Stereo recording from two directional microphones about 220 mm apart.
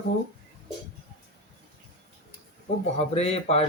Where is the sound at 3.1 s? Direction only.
30° left (ahead or behind).